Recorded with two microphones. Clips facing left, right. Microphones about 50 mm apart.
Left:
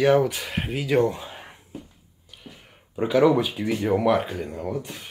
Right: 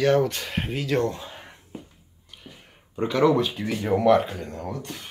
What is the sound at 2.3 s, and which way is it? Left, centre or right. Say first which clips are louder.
Speech: left 1 dB; centre.